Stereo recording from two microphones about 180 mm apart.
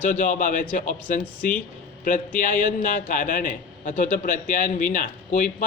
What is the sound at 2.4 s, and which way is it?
A man's voice, 45° left (ahead or behind).